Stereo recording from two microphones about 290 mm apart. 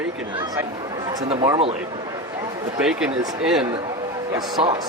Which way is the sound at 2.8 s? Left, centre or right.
Centre.